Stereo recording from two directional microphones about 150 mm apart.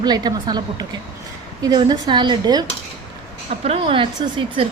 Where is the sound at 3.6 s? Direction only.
35° right (ahead or behind).